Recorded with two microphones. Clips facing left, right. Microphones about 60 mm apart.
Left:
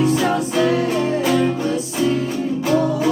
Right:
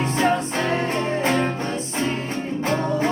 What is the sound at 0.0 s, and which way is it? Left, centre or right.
Music, right.